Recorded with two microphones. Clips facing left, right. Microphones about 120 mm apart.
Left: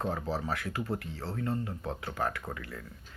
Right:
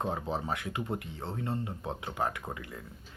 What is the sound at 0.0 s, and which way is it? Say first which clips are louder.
Speech: even; 20° right (ahead or behind).